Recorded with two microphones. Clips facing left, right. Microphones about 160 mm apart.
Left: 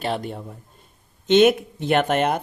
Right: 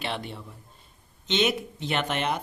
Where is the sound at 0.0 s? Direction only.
45° left (ahead or behind).